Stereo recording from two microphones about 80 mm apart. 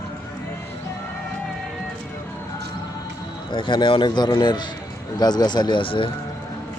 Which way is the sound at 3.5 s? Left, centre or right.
Left.